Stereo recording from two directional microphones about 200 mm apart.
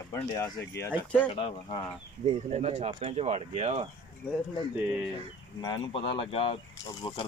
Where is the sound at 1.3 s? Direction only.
30° left (ahead or behind).